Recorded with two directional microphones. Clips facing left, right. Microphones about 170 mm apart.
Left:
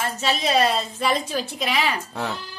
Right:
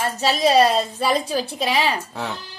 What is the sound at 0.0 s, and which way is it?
A woman's voice, 35° right (ahead or behind).